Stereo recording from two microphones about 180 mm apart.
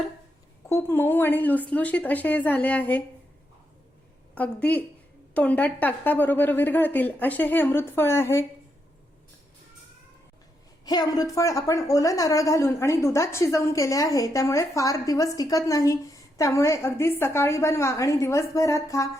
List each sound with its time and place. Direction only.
0.7 s a woman's voice: 15° left (ahead or behind)
4.4 s a woman's voice: 10° left (ahead or behind)
10.8 s a woman's voice: 20° left (ahead or behind)